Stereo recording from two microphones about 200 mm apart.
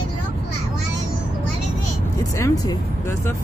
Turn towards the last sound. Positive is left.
turn(degrees=15)  # may be behind; listen again after turning